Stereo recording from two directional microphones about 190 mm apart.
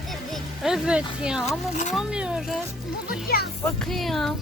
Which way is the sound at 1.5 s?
40° left (ahead or behind).